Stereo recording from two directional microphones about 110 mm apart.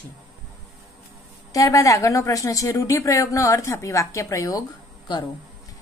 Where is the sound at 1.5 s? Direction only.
30° left (ahead or behind).